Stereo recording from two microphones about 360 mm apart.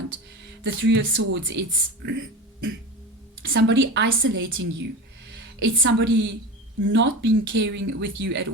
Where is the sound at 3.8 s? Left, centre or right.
Right.